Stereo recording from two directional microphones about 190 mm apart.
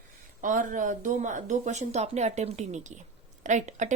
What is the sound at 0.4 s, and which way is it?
Speech, 40° right (ahead or behind).